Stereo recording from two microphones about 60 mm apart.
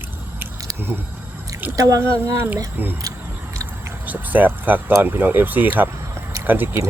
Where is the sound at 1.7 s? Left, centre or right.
Right.